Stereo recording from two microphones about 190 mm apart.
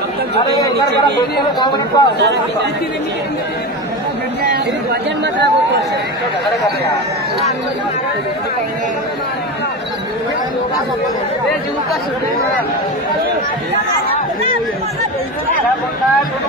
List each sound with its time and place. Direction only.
1.4 s speech: 20° left (ahead or behind)
2.1 s speech: 65° right (ahead or behind)
5.2 s speech: 65° right (ahead or behind)